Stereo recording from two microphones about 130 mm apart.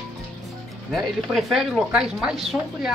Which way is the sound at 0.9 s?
Centre (ahead or behind).